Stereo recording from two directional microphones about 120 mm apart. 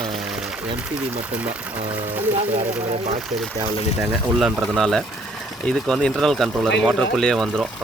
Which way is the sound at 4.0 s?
5° right (ahead or behind).